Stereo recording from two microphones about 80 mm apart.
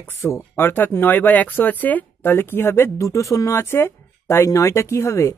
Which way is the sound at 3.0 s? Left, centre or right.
Left.